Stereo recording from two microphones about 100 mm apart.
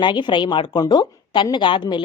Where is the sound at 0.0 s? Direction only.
50° left (ahead or behind).